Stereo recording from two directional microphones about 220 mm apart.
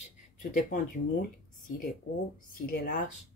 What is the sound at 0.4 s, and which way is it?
Speech, 35° left (ahead or behind).